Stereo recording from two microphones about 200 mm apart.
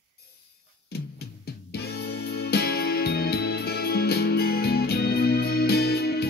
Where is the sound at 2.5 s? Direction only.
50° left (ahead or behind).